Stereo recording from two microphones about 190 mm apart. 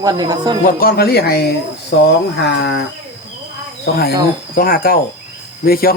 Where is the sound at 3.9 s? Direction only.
60° left (ahead or behind).